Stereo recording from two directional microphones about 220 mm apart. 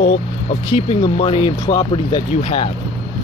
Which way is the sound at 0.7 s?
25° left (ahead or behind).